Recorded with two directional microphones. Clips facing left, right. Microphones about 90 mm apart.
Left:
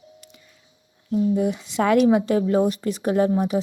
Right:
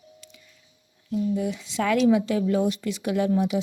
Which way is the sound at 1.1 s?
45° left (ahead or behind).